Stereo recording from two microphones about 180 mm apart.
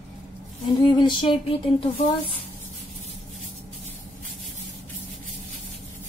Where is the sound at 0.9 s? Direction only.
25° left (ahead or behind).